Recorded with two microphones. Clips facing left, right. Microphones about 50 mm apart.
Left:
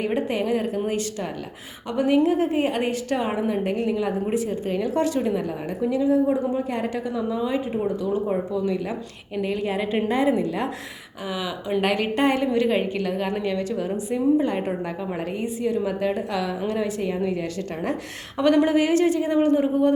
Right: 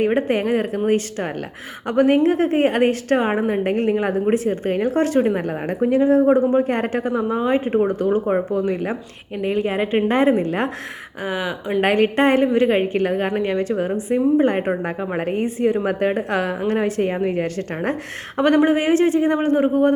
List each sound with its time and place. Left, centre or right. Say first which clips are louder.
0.0 s a woman's voice: right 5 dB; right